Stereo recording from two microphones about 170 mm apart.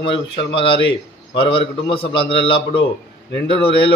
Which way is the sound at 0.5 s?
30° left (ahead or behind).